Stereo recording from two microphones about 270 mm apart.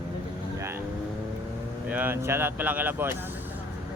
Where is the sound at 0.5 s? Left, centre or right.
Centre.